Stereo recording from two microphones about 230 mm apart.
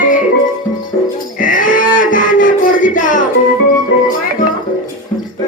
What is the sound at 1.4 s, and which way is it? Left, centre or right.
Livestock, left.